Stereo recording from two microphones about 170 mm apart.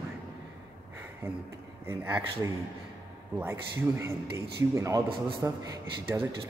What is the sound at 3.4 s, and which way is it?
A man's voice, 15° right (ahead or behind).